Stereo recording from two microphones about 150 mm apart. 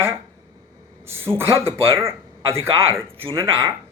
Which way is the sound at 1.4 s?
15° right (ahead or behind).